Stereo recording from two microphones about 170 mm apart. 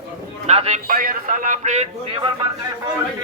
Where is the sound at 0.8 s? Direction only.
55° right (ahead or behind).